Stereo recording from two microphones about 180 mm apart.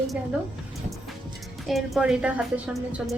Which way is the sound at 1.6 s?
Centre (ahead or behind).